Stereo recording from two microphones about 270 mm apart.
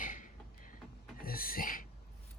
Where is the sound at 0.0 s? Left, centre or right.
Left.